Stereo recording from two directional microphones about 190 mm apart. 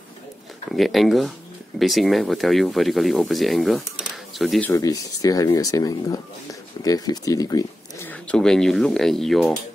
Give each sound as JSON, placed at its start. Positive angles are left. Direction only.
{"t": 0.7, "sound": "speech", "side_deg": 0}
{"t": 4.6, "sound": "speech", "side_deg": 15}
{"t": 8.1, "sound": "speech", "side_deg": 5}